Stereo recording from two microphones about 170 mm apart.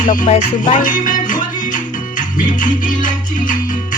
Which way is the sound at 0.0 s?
50° left (ahead or behind).